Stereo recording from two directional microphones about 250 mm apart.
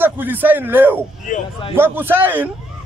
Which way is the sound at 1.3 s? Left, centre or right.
Left.